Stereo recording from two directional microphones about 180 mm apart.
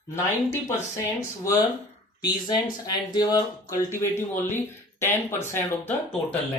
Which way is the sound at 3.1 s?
20° left (ahead or behind).